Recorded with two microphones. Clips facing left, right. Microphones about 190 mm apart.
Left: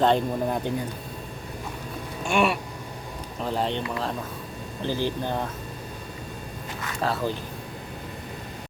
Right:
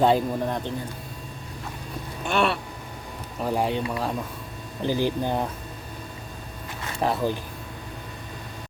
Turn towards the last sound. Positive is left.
turn(degrees=-15)  # may be behind; listen again after turning